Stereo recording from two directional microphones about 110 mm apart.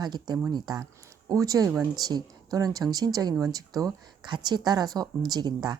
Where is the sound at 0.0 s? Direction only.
40° right (ahead or behind).